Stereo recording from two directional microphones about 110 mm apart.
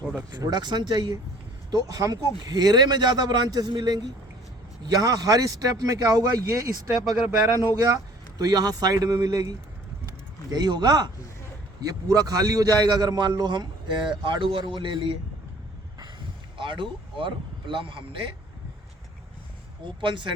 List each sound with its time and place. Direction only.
0.2 s a man's voice: 35° right (ahead or behind)
7.7 s a man's voice: 35° right (ahead or behind)
16.6 s speech: 50° right (ahead or behind)
19.8 s speech: 45° right (ahead or behind)